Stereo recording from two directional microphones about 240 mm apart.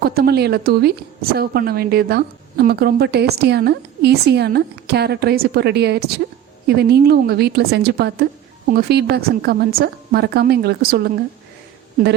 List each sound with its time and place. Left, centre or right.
0.0 s a woman's voice: right